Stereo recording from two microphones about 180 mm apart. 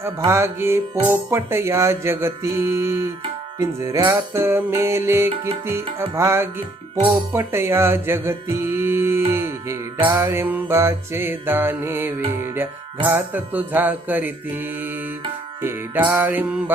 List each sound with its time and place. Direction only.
0.3 s music: 15° right (ahead or behind)
7.3 s mantra: 15° right (ahead or behind)
10.0 s music: 25° right (ahead or behind)
10.2 s music: 10° right (ahead or behind)